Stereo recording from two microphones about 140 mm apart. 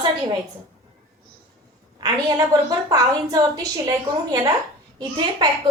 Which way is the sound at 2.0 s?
25° right (ahead or behind).